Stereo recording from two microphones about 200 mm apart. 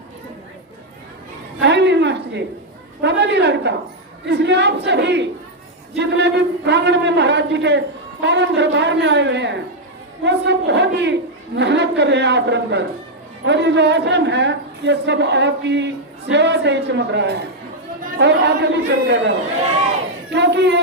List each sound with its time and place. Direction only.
1.6 s a sound: 60° right (ahead or behind)
3.0 s a woman's voice: 60° right (ahead or behind)
20.3 s a woman's voice: 60° right (ahead or behind)